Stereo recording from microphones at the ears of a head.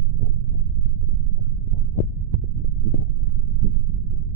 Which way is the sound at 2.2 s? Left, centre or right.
Right.